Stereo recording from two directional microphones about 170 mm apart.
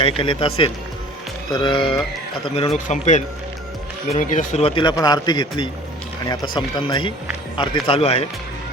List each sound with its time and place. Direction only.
0.2 s speech: 30° left (ahead or behind)
2.7 s speech: 45° left (ahead or behind)